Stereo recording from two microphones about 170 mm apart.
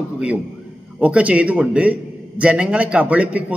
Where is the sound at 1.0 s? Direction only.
10° right (ahead or behind).